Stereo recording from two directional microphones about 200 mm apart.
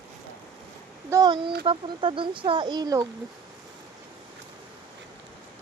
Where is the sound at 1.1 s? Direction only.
20° right (ahead or behind).